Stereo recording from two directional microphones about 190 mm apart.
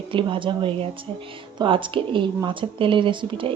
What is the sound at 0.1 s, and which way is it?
Speech, 25° right (ahead or behind).